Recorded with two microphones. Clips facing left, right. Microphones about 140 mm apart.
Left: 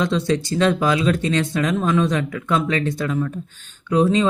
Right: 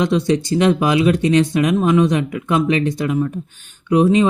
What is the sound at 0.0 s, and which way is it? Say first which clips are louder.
Speech: right 3 dB; 15° right (ahead or behind).